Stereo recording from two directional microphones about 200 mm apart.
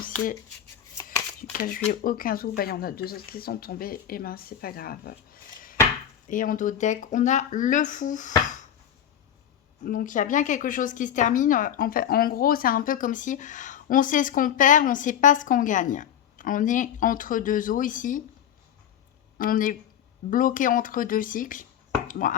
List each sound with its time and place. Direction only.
1.5 s speech: 45° left (ahead or behind)
9.8 s speech: 40° left (ahead or behind)
19.4 s speech: 45° left (ahead or behind)